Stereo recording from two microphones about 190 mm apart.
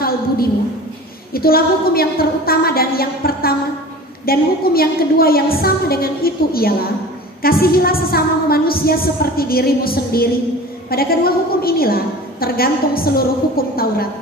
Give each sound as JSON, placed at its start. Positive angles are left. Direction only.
{"t": 1.3, "sound": "a woman's voice", "side_deg": 50}